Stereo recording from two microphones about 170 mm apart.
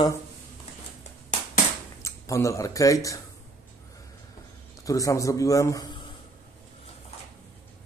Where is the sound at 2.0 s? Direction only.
20° left (ahead or behind).